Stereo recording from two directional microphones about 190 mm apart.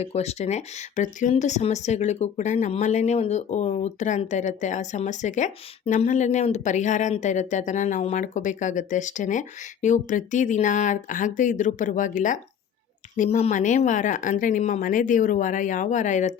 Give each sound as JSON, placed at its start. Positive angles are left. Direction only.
{"t": 0.0, "sound": "speech", "side_deg": 35}